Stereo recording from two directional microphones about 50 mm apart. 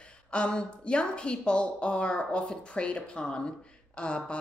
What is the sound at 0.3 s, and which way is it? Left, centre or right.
Speech, centre.